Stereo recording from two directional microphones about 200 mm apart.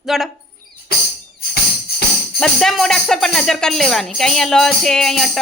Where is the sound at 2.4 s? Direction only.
Centre (ahead or behind).